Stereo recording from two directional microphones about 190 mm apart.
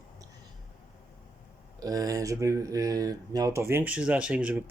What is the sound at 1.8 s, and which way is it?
Speech, 20° right (ahead or behind).